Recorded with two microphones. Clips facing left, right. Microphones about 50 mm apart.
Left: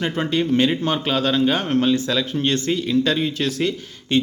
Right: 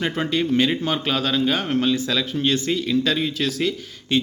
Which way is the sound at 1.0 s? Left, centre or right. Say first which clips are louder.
Left 3 dB; centre.